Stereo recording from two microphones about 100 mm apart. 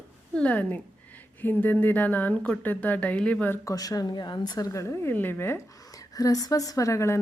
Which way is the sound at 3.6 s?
40° left (ahead or behind).